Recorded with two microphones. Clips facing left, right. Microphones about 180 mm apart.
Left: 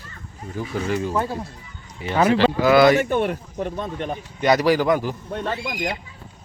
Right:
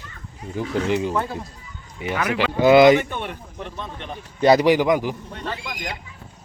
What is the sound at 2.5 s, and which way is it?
Speech, 20° right (ahead or behind).